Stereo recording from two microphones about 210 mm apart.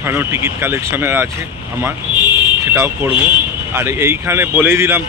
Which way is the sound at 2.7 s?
10° right (ahead or behind).